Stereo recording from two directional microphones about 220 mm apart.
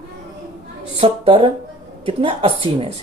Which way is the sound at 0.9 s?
25° right (ahead or behind).